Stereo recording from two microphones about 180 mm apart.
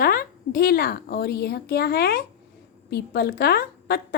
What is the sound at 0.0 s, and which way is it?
A woman's voice, 55° left (ahead or behind).